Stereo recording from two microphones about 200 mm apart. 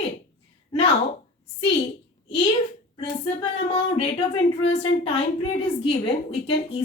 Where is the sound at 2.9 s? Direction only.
30° left (ahead or behind).